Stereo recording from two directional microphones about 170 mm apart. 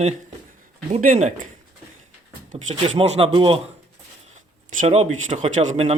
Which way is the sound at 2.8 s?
35° right (ahead or behind).